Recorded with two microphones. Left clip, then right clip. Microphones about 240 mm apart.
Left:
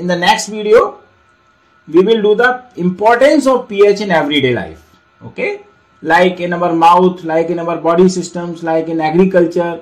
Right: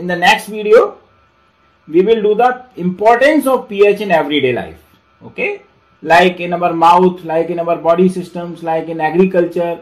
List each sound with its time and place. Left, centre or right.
0.0 s a man's voice: left
1.9 s a man's voice: left
6.4 s a man's voice: left